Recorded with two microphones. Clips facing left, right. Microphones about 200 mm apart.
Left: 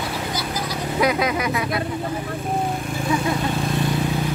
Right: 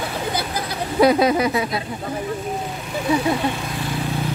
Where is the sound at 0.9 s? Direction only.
30° right (ahead or behind).